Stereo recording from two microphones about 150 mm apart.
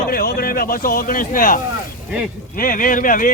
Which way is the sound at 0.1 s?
85° left.